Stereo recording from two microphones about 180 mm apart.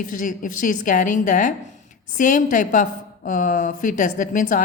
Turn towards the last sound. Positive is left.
turn(degrees=45)  # may be behind; listen again after turning